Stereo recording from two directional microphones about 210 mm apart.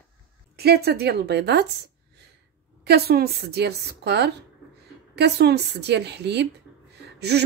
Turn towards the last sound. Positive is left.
turn(degrees=-50)  # may be behind; listen again after turning